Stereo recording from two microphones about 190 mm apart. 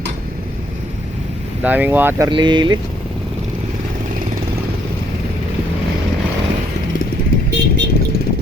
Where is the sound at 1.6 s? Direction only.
10° right (ahead or behind).